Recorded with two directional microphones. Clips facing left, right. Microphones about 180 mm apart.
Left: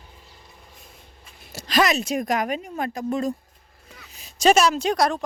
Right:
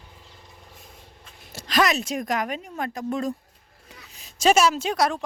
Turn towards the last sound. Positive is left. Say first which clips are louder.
# left 2 dB
turn(degrees=-5)  # may be behind; listen again after turning